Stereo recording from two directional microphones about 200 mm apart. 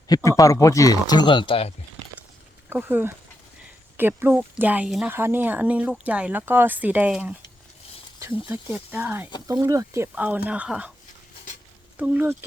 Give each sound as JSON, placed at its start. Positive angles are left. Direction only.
{"t": 0.1, "sound": "speech", "side_deg": 15}
{"t": 2.6, "sound": "speech", "side_deg": -10}
{"t": 11.9, "sound": "speech", "side_deg": -10}